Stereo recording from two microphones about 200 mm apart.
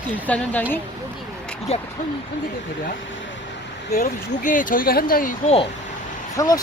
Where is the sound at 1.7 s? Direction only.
30° left (ahead or behind).